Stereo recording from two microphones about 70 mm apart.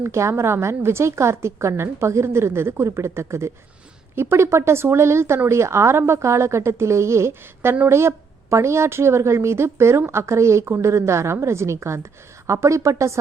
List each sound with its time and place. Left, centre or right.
0.0 s a woman's voice: right